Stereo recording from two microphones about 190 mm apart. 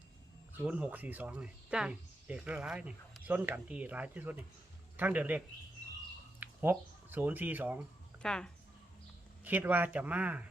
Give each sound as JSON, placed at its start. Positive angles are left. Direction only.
{"t": 0.5, "sound": "speech", "side_deg": -5}
{"t": 6.4, "sound": "speech", "side_deg": -10}
{"t": 8.2, "sound": "speech", "side_deg": 5}
{"t": 9.4, "sound": "speech", "side_deg": -10}